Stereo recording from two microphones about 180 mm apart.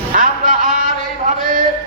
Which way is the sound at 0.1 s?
50° right (ahead or behind).